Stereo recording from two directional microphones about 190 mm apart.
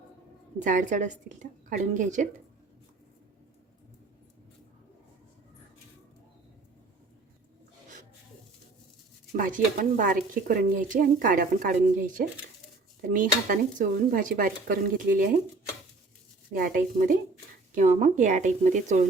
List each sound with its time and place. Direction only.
0.6 s a woman's voice: 45° right (ahead or behind)
9.3 s speech: 45° right (ahead or behind)
16.6 s a woman's voice: 45° right (ahead or behind)